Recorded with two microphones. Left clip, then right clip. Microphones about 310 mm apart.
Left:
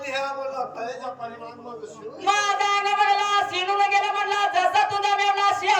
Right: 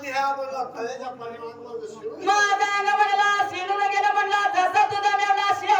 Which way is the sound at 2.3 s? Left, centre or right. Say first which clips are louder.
Right 1 dB; centre.